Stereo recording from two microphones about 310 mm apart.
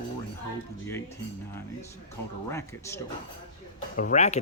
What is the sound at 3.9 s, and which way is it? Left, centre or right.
Speech, left.